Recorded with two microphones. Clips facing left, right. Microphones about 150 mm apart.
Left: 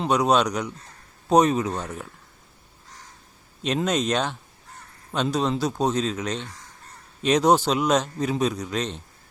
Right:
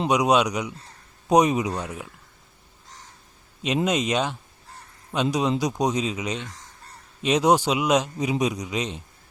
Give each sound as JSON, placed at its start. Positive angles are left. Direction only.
{"t": 0.0, "sound": "a man's voice", "side_deg": -10}
{"t": 3.8, "sound": "a man's voice", "side_deg": -10}